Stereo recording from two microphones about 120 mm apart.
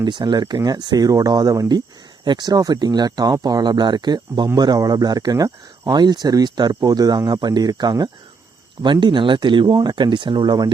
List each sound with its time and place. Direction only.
0.0 s speech: 40° right (ahead or behind)